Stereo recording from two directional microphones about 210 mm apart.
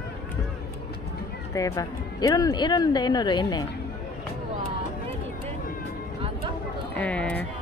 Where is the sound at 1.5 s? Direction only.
15° left (ahead or behind).